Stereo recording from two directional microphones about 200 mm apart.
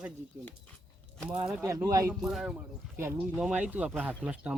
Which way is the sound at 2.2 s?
Centre (ahead or behind).